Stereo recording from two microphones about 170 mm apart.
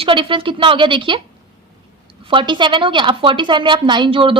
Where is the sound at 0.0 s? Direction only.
30° right (ahead or behind).